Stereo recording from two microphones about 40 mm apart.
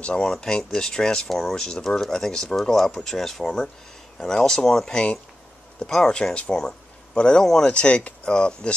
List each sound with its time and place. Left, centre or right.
0.0 s speech: centre